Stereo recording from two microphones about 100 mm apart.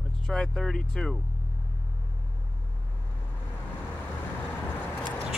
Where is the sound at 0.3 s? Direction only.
5° left (ahead or behind).